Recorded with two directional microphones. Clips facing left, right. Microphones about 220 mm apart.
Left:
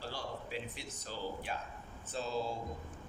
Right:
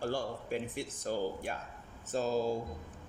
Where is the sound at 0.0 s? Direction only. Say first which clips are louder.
Right 7 dB; 50° right (ahead or behind).